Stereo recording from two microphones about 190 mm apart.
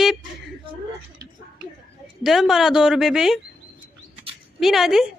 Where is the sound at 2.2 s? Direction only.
Centre (ahead or behind).